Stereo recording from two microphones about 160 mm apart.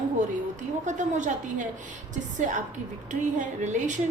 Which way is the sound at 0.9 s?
50° right (ahead or behind).